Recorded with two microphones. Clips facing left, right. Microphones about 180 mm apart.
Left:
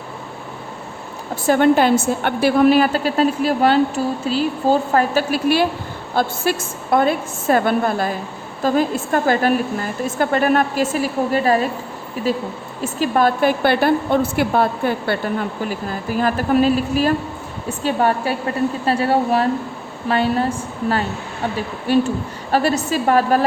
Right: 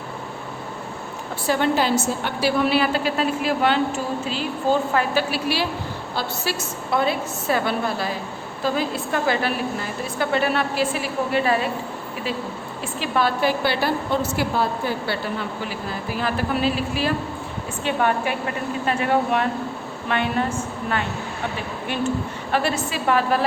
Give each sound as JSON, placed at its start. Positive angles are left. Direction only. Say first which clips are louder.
{"t": 1.5, "sound": "a woman's voice", "louder": "left 7 dB", "side_deg": 55}
{"t": 12.8, "sound": "a woman's voice", "louder": "left 6 dB", "side_deg": 45}
{"t": 21.9, "sound": "a woman's voice", "louder": "left 7 dB", "side_deg": 35}